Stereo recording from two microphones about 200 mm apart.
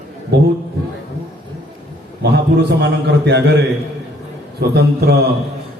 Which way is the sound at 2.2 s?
55° right (ahead or behind).